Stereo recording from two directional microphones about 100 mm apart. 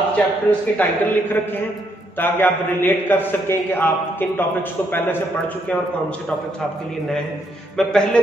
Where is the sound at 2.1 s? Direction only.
20° left (ahead or behind).